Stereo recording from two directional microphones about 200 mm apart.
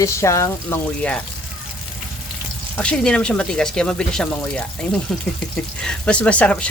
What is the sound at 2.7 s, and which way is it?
Speech, 5° left (ahead or behind).